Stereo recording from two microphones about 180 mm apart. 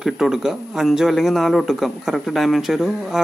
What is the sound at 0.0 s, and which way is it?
Speech, centre (ahead or behind).